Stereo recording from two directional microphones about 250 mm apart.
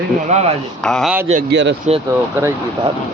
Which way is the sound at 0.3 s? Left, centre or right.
Right.